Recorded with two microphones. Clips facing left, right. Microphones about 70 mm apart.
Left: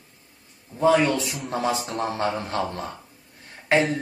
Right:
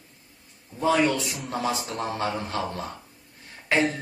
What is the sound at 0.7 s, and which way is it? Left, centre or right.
Speech, left.